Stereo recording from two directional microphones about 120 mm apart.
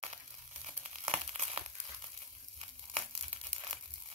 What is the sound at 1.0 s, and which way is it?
Crumpling, 65° right (ahead or behind).